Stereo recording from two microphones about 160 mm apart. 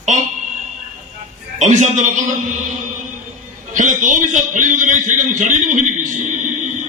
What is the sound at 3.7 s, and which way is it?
A man's voice, 50° right (ahead or behind).